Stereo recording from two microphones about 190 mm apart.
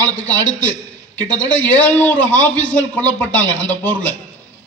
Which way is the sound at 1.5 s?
10° left (ahead or behind).